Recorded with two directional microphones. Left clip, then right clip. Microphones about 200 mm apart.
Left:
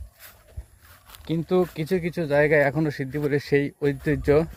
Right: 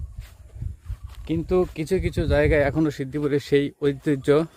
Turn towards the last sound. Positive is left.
turn(degrees=-15)  # may be behind; listen again after turning